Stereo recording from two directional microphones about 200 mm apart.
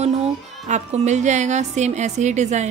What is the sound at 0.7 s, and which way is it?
A woman's voice, 35° right (ahead or behind).